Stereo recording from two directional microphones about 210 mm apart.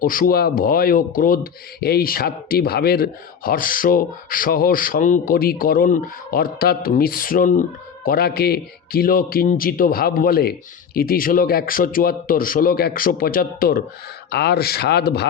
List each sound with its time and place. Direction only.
0.0 s a man's voice: 40° left (ahead or behind)